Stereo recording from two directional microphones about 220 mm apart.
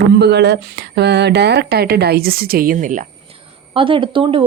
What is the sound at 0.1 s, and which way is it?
Speech, 50° right (ahead or behind).